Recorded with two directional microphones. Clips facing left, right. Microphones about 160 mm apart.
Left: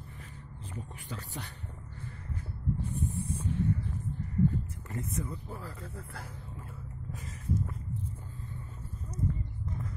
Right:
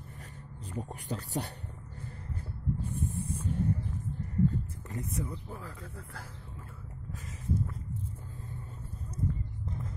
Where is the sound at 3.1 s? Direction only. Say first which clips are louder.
Even; 45° right (ahead or behind).